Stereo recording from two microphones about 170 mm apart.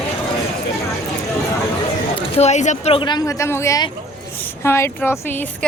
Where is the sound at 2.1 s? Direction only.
40° left (ahead or behind).